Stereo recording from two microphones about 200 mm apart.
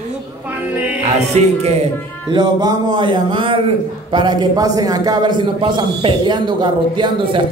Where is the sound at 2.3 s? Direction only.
20° right (ahead or behind).